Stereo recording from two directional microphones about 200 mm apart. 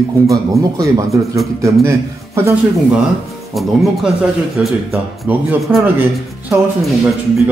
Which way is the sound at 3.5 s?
Centre (ahead or behind).